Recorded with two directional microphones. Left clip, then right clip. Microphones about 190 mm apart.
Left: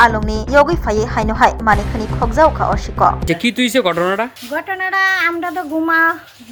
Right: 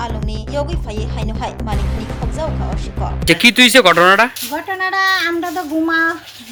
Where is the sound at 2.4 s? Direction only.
25° left (ahead or behind).